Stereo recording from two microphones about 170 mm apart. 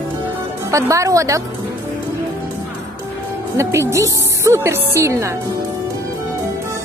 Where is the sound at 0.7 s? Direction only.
20° right (ahead or behind).